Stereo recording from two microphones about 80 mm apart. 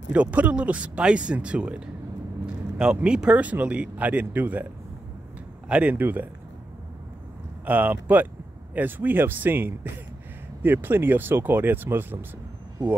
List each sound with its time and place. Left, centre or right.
0.1 s speech: centre
2.8 s speech: centre
5.7 s speech: centre
7.6 s speech: centre